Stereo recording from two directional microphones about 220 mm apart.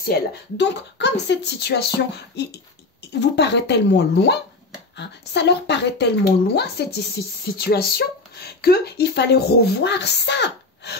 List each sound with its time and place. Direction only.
0.6 s speech: 50° left (ahead or behind)